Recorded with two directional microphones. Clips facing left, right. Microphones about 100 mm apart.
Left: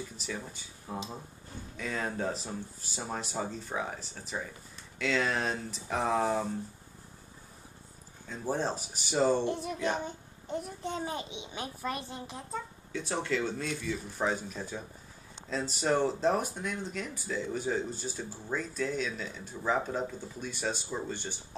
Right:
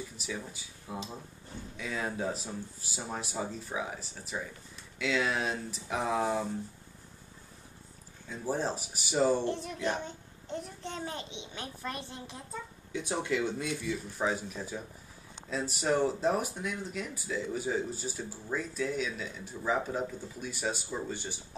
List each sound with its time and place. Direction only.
0.5 s speech: 5° right (ahead or behind)
0.9 s a child's voice: 15° left (ahead or behind)
1.8 s speech: 5° right (ahead or behind)
8.3 s speech: 5° right (ahead or behind)
9.5 s a child's voice: 10° left (ahead or behind)
12.9 s speech: 15° right (ahead or behind)
13.9 s speech: centre (ahead or behind)